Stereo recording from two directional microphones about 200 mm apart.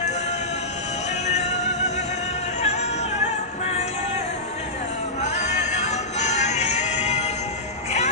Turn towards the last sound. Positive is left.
turn(degrees=35)  # may be behind; listen again after turning